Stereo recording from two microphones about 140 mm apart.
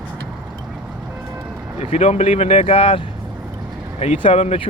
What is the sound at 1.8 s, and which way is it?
Speech, 45° left (ahead or behind).